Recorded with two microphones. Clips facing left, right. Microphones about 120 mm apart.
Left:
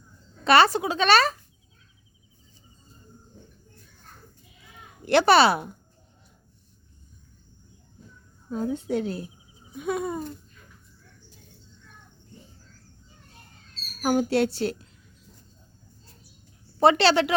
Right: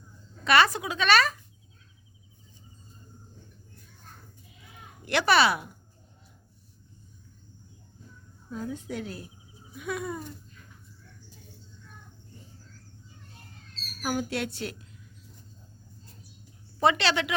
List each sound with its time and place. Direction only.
0.4 s speech: 30° left (ahead or behind)
5.0 s speech: 30° left (ahead or behind)
8.4 s a woman's voice: 30° left (ahead or behind)
14.0 s speech: 35° left (ahead or behind)
16.8 s speech: 35° left (ahead or behind)